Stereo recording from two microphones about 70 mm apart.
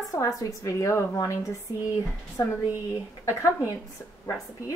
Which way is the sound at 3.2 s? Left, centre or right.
Left.